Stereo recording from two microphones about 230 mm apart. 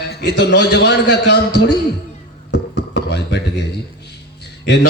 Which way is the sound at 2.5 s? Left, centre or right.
Left.